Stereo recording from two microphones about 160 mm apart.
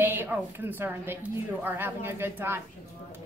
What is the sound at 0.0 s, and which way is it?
A woman's voice, 10° right (ahead or behind).